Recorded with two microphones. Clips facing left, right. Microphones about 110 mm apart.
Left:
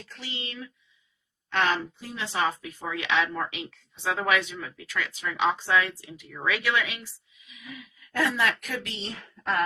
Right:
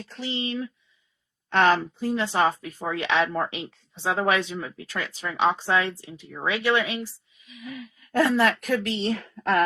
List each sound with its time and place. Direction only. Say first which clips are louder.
0.1 s speech: right 10 dB; 30° right (ahead or behind)
9.1 s a woman's voice: right 2 dB; 65° right (ahead or behind)